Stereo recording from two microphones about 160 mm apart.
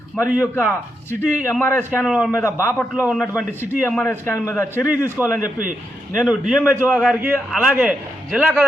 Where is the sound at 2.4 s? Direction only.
15° left (ahead or behind).